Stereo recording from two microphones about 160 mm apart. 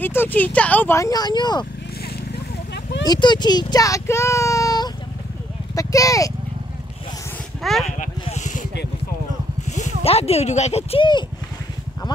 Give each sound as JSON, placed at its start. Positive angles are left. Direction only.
{"t": 0.0, "sound": "speech", "side_deg": 15}
{"t": 2.3, "sound": "vehicle", "side_deg": 90}
{"t": 3.1, "sound": "a child's voice", "side_deg": 25}
{"t": 7.6, "sound": "speech", "side_deg": 0}
{"t": 8.0, "sound": "vehicle", "side_deg": 50}
{"t": 9.7, "sound": "speech", "side_deg": 45}